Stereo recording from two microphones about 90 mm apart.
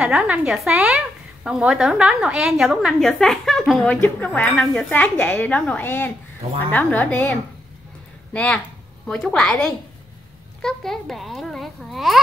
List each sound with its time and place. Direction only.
0.0 s a woman's voice: 15° right (ahead or behind)